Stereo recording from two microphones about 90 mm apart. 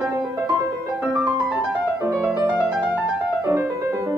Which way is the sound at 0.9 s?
10° right (ahead or behind).